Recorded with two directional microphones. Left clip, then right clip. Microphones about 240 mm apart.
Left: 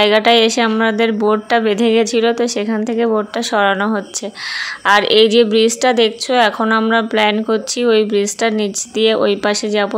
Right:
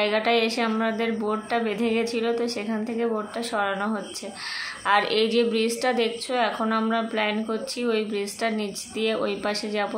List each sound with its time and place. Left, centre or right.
0.0 s a woman's voice: left